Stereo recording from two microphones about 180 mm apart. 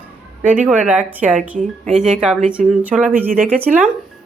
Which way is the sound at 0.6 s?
5° right (ahead or behind).